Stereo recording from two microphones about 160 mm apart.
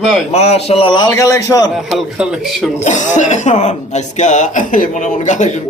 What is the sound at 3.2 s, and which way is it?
A man's voice, 50° left (ahead or behind).